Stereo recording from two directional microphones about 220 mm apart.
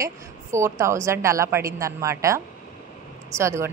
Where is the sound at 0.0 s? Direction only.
15° right (ahead or behind).